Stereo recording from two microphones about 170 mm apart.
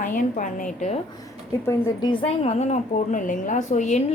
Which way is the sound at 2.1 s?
35° left (ahead or behind).